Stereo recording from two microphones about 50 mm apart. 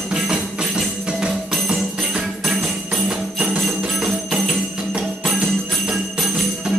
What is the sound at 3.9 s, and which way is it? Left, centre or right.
Music, centre.